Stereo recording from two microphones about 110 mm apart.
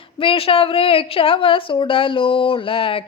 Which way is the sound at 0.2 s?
55° left (ahead or behind).